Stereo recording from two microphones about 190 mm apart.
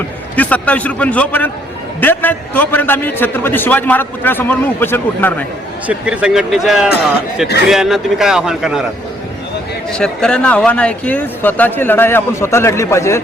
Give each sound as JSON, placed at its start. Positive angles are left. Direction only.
{"t": 0.3, "sound": "a man's voice", "side_deg": 10}
{"t": 5.9, "sound": "a man's voice", "side_deg": -5}
{"t": 9.9, "sound": "a man's voice", "side_deg": 5}